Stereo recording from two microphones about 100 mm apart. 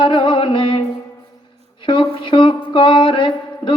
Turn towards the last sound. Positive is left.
turn(degrees=55)  # may be behind; listen again after turning